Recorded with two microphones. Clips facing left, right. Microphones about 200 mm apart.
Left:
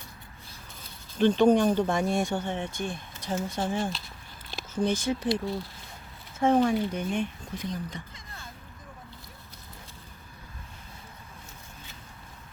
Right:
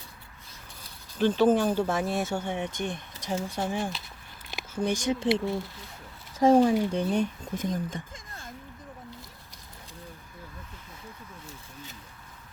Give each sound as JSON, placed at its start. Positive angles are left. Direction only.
{"t": 1.2, "sound": "speech", "side_deg": -5}